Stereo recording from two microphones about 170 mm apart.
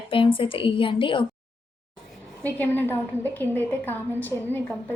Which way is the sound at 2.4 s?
10° left (ahead or behind).